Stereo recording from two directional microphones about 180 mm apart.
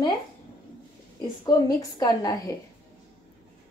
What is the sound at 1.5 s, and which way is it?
A woman's voice, 20° left (ahead or behind).